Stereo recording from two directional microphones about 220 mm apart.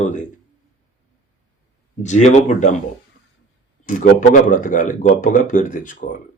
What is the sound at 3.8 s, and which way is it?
A man's voice, 35° left (ahead or behind).